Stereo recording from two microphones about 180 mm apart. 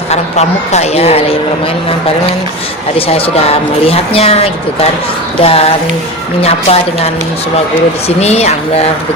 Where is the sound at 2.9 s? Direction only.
30° left (ahead or behind).